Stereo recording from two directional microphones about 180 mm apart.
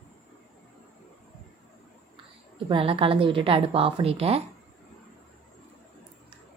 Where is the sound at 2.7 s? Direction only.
30° right (ahead or behind).